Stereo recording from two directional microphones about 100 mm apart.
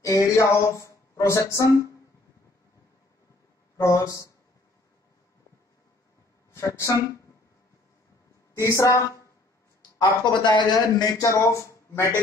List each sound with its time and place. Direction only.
0.0 s speech: 35° left (ahead or behind)
3.7 s speech: 30° left (ahead or behind)
6.5 s speech: 30° left (ahead or behind)
8.5 s speech: 30° left (ahead or behind)
9.8 s a man's voice: 45° left (ahead or behind); by 12.1 s 30° left (ahead or behind)